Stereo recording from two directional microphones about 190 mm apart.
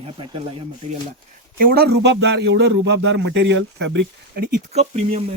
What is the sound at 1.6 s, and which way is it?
A man's voice, 50° right (ahead or behind).